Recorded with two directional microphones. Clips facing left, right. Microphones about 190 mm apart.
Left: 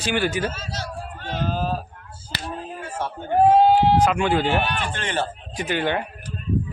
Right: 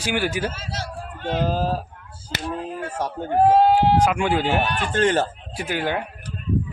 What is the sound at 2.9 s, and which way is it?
Speech, 40° right (ahead or behind).